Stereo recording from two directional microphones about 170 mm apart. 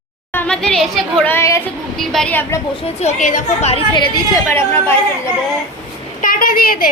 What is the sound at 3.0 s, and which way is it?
Speech, 50° left (ahead or behind).